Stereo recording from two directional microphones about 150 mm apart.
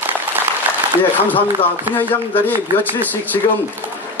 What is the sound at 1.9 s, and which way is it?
A man's voice, 10° left (ahead or behind).